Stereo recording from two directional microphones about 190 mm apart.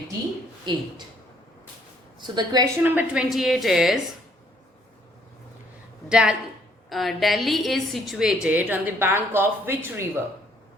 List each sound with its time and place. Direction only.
0.7 s a woman's voice: 25° right (ahead or behind)
2.2 s a woman's voice: 20° right (ahead or behind)
2.8 s a woman's voice: 10° right (ahead or behind)
6.1 s a woman's voice: 5° right (ahead or behind)